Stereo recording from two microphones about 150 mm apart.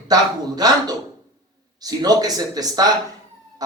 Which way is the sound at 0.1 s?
25° right (ahead or behind).